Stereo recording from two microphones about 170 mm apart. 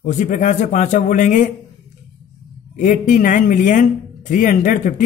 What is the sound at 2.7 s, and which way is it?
Speech, 50° left (ahead or behind).